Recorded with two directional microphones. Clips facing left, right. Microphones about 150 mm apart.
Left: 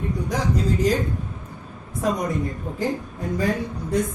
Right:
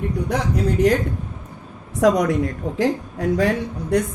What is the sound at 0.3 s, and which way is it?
Speech, 65° right (ahead or behind).